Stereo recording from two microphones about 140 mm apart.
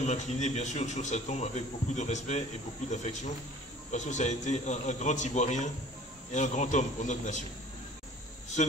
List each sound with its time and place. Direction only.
0.0 s speech: 55° left (ahead or behind)